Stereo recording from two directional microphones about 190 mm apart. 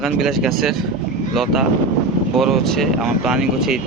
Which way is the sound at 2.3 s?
Centre (ahead or behind).